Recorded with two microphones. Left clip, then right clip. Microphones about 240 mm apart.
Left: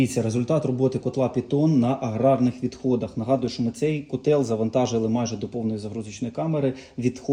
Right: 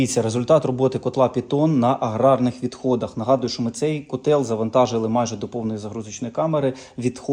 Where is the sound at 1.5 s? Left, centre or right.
Right.